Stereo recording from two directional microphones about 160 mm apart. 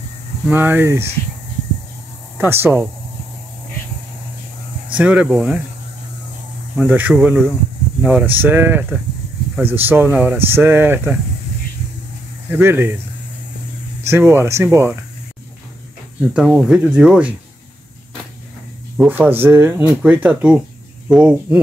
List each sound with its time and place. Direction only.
0.5 s speech: 10° right (ahead or behind)
2.3 s speech: 15° right (ahead or behind)
4.9 s speech: 10° right (ahead or behind)
6.8 s speech: 10° right (ahead or behind)
12.4 s speech: 15° right (ahead or behind)
14.0 s speech: 15° right (ahead or behind)
16.3 s speech: 5° right (ahead or behind)
18.9 s speech: 10° right (ahead or behind)